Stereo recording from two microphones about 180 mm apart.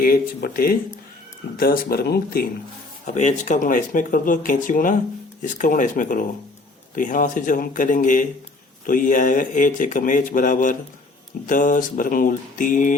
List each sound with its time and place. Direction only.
0.0 s speech: 55° left (ahead or behind)
3.1 s speech: 40° left (ahead or behind)